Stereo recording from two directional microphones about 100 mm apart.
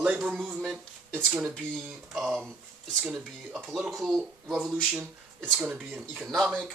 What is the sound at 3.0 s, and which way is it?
Speech, 10° right (ahead or behind).